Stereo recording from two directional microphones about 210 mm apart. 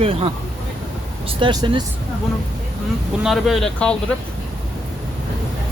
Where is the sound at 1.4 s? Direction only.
20° right (ahead or behind).